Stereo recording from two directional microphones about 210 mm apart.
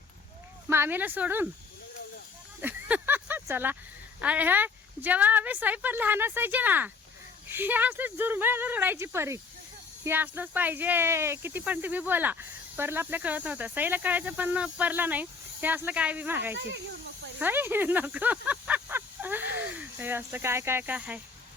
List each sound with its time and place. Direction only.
0.7 s speech: 10° right (ahead or behind)
2.6 s a sound: 10° right (ahead or behind)
4.2 s speech: 5° right (ahead or behind)
16.6 s speech: 55° right (ahead or behind)
17.4 s speech: 10° right (ahead or behind)